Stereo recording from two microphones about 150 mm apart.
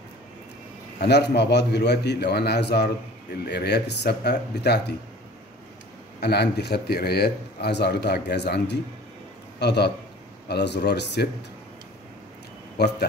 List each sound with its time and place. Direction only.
0.9 s a man's voice: 90° left
6.2 s a man's voice: 90° left
12.8 s a man's voice: 90° left